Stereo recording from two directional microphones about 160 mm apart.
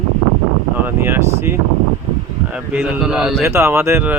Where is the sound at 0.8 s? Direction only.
15° right (ahead or behind).